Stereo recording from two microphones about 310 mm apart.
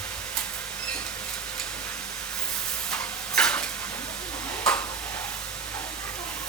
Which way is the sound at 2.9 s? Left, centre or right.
Centre.